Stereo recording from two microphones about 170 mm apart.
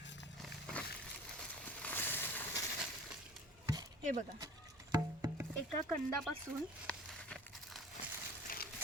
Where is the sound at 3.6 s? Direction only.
20° right (ahead or behind).